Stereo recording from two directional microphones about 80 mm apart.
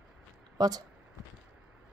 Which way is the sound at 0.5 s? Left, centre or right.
Right.